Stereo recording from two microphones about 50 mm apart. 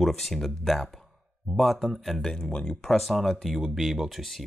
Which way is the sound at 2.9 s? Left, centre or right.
Centre.